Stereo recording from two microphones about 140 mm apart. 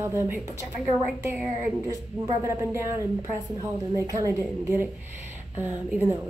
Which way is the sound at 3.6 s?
25° right (ahead or behind).